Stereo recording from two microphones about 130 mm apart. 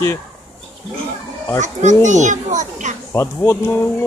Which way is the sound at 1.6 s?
70° right (ahead or behind).